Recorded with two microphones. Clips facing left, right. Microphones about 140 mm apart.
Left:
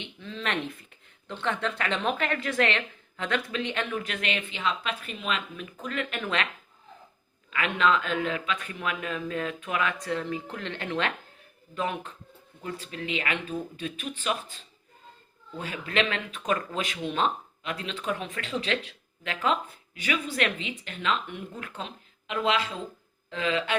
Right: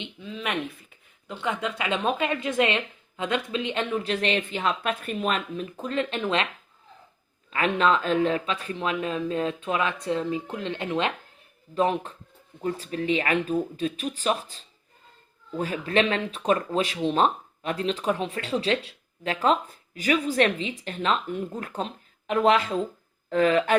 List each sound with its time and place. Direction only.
0.0 s speech: 10° right (ahead or behind); by 5.6 s 45° right (ahead or behind)
5.7 s speech: 30° right (ahead or behind)
7.5 s speech: 35° right (ahead or behind); by 11.1 s 20° right (ahead or behind)
11.7 s speech: 35° right (ahead or behind)